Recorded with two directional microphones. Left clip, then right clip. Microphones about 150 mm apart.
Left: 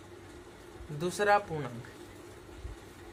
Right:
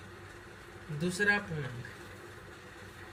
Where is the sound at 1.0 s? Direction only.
25° left (ahead or behind).